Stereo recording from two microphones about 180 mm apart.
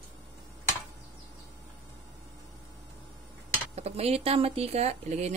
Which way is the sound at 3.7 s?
35° right (ahead or behind).